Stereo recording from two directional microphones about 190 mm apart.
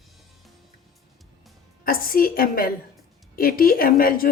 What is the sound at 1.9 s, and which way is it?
Speech, 50° left (ahead or behind).